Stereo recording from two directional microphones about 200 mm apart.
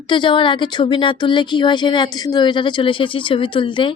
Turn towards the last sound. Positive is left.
turn(degrees=25)  # may be behind; listen again after turning